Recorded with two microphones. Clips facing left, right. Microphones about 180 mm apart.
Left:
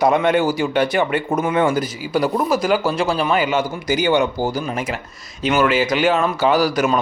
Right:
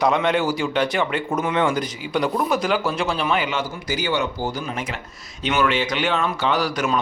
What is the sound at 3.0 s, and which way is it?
Speech, 35° left (ahead or behind).